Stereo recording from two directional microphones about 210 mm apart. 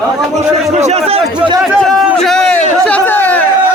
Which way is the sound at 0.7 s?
30° right (ahead or behind).